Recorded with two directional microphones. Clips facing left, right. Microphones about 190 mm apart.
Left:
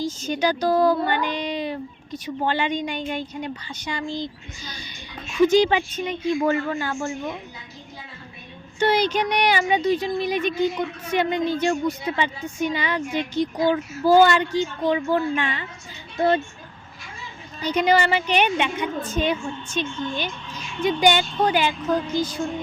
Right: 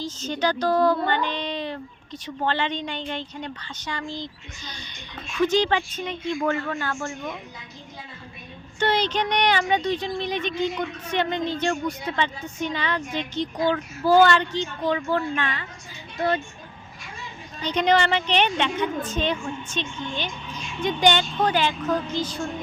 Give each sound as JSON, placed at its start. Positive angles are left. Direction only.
{"t": 0.0, "sound": "speech", "side_deg": 10}
{"t": 8.8, "sound": "speech", "side_deg": 10}
{"t": 16.1, "sound": "speech", "side_deg": 25}
{"t": 17.6, "sound": "speech", "side_deg": 10}
{"t": 20.5, "sound": "music", "side_deg": -10}
{"t": 20.8, "sound": "speech", "side_deg": 10}